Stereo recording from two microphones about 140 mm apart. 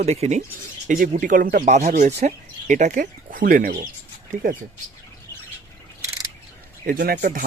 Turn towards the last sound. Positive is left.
turn(degrees=-75)  # may be behind; listen again after turning